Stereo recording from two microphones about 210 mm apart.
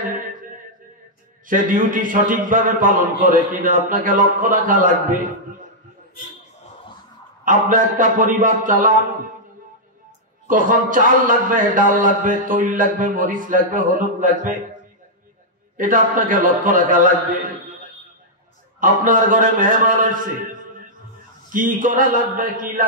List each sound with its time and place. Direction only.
0.1 s music: 40° right (ahead or behind)
1.5 s a man's voice: 40° right (ahead or behind)
7.4 s a man's voice: 40° right (ahead or behind)
10.4 s a man's voice: 40° right (ahead or behind)
15.8 s a man's voice: 40° right (ahead or behind)
18.8 s a man's voice: 40° right (ahead or behind)
21.5 s a man's voice: 40° right (ahead or behind)